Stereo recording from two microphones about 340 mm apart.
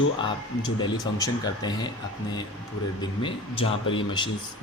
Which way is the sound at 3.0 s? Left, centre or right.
Centre.